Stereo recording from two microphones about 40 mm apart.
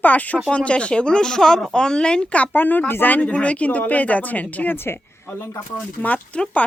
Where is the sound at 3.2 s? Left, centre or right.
Left.